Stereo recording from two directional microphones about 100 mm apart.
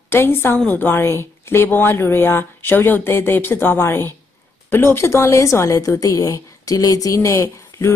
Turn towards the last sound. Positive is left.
turn(degrees=30)  # may be behind; listen again after turning